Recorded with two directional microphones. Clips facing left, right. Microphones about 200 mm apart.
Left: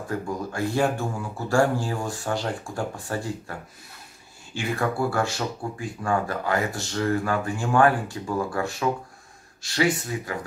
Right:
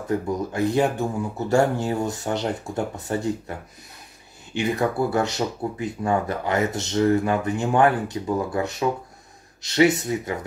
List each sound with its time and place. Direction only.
0.1 s speech: 20° right (ahead or behind)
4.6 s speech: 20° right (ahead or behind)